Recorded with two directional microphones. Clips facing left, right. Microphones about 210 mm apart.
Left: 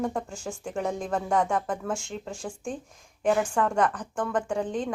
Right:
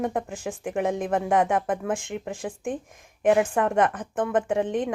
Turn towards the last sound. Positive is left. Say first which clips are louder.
# right 4 dB
turn(degrees=-20)  # may be behind; listen again after turning